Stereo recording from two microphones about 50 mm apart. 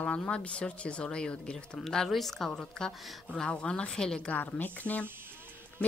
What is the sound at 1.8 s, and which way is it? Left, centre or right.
Speech, centre.